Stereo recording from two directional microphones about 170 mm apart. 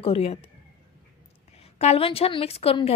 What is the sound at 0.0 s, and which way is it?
Speech, 35° left (ahead or behind).